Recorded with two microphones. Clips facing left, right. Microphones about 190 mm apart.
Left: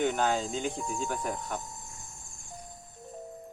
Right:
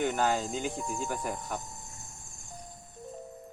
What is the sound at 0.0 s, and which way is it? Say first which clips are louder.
Speech: left 1 dB; 5° right (ahead or behind).